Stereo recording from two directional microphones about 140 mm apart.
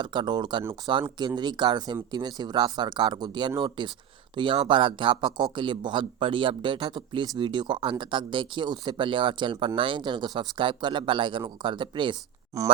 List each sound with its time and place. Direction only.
0.0 s speech: 35° right (ahead or behind)
12.5 s speech: 25° right (ahead or behind)